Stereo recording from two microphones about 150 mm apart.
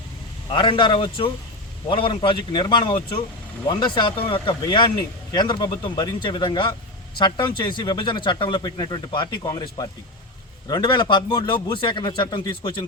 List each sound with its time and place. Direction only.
0.5 s speech: 35° left (ahead or behind)